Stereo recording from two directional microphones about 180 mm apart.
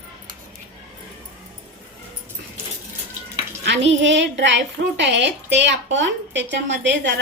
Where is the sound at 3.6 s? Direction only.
75° right (ahead or behind).